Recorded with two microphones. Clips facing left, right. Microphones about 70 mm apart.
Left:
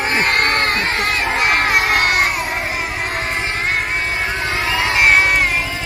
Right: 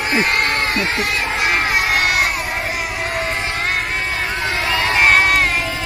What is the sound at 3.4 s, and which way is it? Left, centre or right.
Music, left.